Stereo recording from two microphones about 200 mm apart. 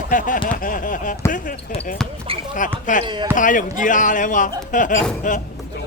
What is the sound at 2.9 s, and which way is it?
A man's voice, 40° left (ahead or behind).